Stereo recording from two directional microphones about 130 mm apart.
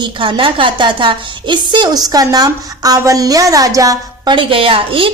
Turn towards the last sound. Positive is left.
turn(degrees=-40)  # may be behind; listen again after turning